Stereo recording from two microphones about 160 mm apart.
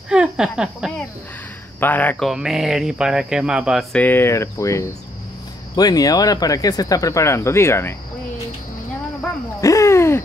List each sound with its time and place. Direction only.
0.1 s speech: 5° right (ahead or behind)
1.8 s speech: 10° left (ahead or behind)
2.2 s speech: 5° right (ahead or behind)
3.9 s speech: 10° left (ahead or behind)
9.6 s a sound: 20° left (ahead or behind)